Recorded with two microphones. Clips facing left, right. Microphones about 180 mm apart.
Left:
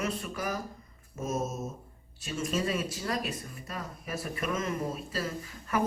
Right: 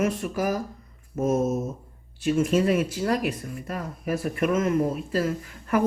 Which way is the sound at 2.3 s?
55° right (ahead or behind).